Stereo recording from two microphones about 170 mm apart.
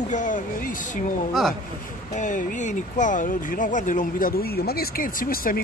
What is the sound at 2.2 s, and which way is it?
Speech, 50° left (ahead or behind).